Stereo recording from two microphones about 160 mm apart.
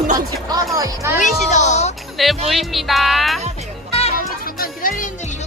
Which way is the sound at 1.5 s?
45° left (ahead or behind).